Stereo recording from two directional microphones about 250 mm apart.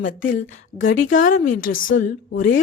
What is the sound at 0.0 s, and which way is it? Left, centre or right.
Speech, left.